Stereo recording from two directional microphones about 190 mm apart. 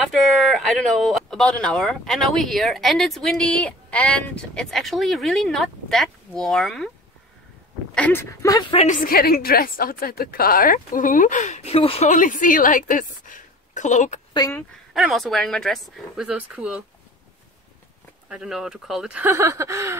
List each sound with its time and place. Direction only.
0.0 s speech: centre (ahead or behind)
7.9 s speech: 10° left (ahead or behind)
8.8 s a woman's voice: 45° left (ahead or behind)
12.1 s a woman's voice: 45° left (ahead or behind)
14.3 s speech: 20° left (ahead or behind)
15.0 s speech: centre (ahead or behind)
18.3 s speech: 5° right (ahead or behind)